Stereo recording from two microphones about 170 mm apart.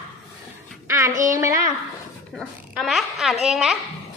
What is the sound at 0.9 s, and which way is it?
Speech, 15° right (ahead or behind).